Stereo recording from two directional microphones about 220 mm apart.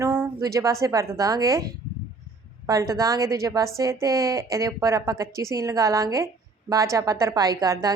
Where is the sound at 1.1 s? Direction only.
15° right (ahead or behind).